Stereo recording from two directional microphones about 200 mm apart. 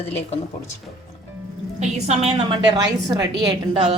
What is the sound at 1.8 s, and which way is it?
A woman's voice, 30° right (ahead or behind).